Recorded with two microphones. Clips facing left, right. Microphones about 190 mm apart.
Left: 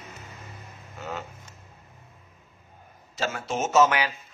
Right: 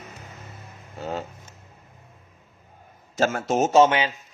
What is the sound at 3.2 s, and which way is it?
Speech, 50° right (ahead or behind).